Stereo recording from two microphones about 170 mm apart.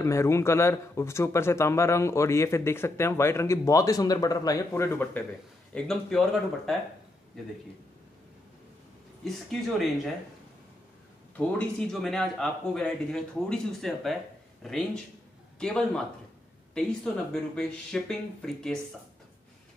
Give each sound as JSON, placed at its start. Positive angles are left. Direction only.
{"t": 0.0, "sound": "a man's voice", "side_deg": 15}
{"t": 11.3, "sound": "a man's voice", "side_deg": 10}